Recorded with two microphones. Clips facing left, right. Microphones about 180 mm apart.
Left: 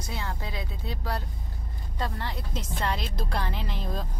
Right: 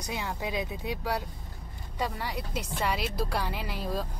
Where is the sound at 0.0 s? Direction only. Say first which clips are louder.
Right 2 dB; 15° right (ahead or behind).